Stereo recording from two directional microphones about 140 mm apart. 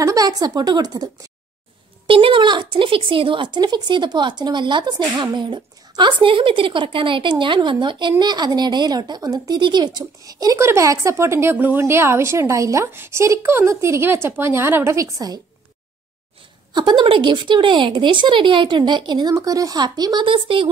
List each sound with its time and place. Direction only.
0.0 s a woman's voice: 25° right (ahead or behind)
2.0 s speech: 40° right (ahead or behind)
16.7 s speech: 35° right (ahead or behind)